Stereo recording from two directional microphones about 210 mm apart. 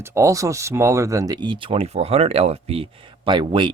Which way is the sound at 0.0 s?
15° right (ahead or behind).